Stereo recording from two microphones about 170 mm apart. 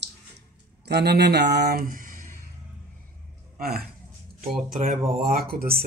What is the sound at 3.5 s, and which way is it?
Speech, 65° right (ahead or behind).